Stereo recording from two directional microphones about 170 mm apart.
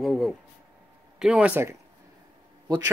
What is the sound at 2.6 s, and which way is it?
Speech, 20° right (ahead or behind).